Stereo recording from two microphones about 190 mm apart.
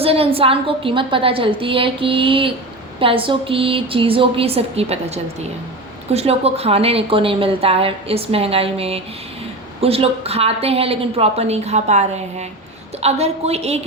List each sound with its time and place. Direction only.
0.0 s a woman's voice: 30° right (ahead or behind)